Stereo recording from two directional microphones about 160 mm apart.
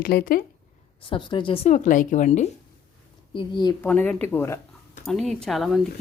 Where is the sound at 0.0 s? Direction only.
75° left (ahead or behind).